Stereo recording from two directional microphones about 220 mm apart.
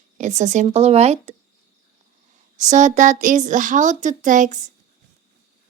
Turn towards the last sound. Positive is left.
turn(degrees=-35)  # may be behind; listen again after turning